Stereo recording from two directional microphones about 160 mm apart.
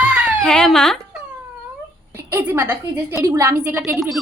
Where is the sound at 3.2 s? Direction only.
20° right (ahead or behind).